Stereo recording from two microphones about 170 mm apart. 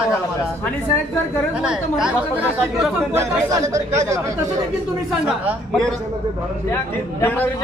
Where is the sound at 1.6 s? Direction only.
5° right (ahead or behind).